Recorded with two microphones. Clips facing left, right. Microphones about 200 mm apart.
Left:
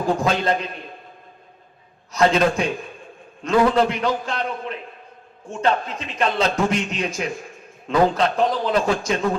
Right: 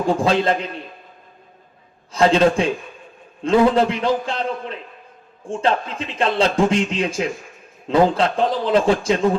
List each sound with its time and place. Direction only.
0.2 s a man's voice: 30° right (ahead or behind)
2.1 s a man's voice: 30° right (ahead or behind)